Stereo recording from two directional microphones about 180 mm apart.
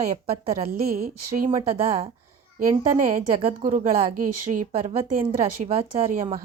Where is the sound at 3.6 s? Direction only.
45° right (ahead or behind).